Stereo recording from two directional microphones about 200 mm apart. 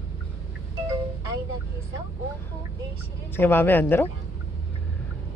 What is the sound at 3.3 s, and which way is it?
Speech, 10° left (ahead or behind).